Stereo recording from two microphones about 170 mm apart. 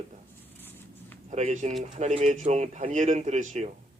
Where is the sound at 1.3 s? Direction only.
45° right (ahead or behind).